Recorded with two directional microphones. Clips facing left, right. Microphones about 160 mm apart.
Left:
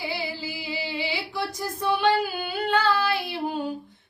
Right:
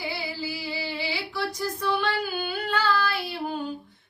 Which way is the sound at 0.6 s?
20° left (ahead or behind).